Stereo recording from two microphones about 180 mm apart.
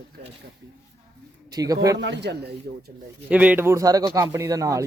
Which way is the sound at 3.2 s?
10° right (ahead or behind).